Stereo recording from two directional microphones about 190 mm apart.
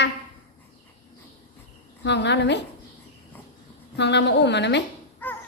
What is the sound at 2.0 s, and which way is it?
Speech, 65° left (ahead or behind).